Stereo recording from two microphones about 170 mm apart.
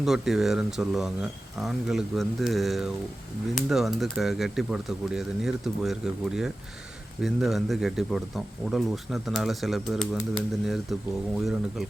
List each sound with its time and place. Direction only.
0.0 s speech: centre (ahead or behind)